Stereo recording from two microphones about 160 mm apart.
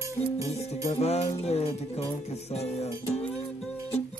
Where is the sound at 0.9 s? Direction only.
40° left (ahead or behind).